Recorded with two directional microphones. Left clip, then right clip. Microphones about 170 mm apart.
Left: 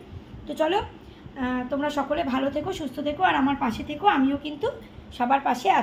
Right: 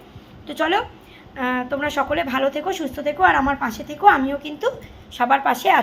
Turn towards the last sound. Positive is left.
turn(degrees=-15)  # may be behind; listen again after turning